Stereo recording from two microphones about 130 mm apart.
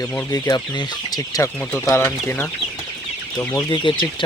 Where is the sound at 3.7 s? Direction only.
40° left (ahead or behind).